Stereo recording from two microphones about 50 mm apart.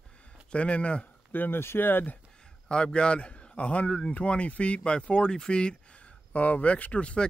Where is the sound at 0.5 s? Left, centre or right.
Left.